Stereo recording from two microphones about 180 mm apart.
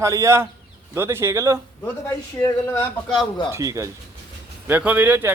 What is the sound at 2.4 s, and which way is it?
A man's voice, 20° left (ahead or behind).